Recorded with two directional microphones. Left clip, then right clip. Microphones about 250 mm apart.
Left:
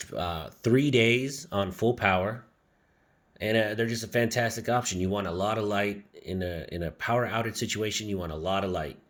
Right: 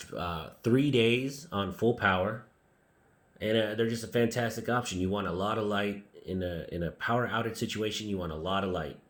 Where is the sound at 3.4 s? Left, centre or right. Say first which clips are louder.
Left 2 dB; left.